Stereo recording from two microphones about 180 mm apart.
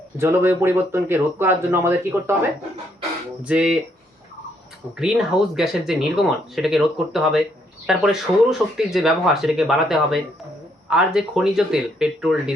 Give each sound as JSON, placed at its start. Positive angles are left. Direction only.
{"t": 0.2, "sound": "speech", "side_deg": -15}
{"t": 3.4, "sound": "speech", "side_deg": -5}
{"t": 4.9, "sound": "speech", "side_deg": -5}